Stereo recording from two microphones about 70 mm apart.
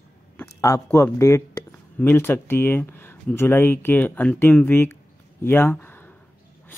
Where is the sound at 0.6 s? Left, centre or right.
Left.